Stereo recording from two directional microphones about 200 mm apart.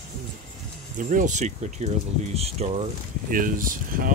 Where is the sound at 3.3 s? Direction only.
45° right (ahead or behind).